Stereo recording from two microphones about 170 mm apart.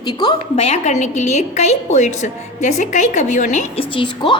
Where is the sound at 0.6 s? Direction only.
40° left (ahead or behind).